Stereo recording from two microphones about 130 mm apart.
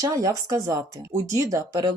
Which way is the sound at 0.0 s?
25° right (ahead or behind).